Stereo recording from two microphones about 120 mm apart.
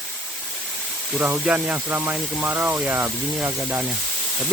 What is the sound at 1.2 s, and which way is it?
Speech, 15° right (ahead or behind).